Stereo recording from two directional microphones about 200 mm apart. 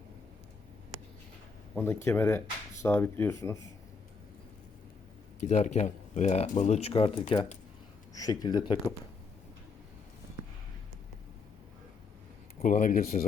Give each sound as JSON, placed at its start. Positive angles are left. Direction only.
{"t": 1.7, "sound": "speech", "side_deg": 10}
{"t": 5.4, "sound": "speech", "side_deg": 35}
{"t": 12.5, "sound": "speech", "side_deg": 40}